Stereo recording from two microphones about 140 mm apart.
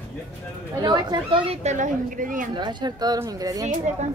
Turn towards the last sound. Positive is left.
turn(degrees=-55)  # may be behind; listen again after turning